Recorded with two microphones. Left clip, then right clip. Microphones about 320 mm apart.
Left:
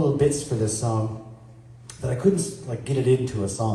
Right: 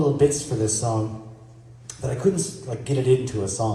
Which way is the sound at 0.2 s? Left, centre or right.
Right.